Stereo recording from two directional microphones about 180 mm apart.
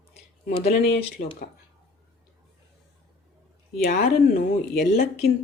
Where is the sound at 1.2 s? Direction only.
45° left (ahead or behind).